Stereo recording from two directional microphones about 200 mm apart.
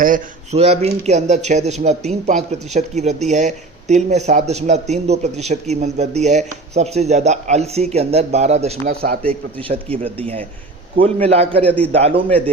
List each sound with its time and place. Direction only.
0.0 s a man's voice: 35° right (ahead or behind)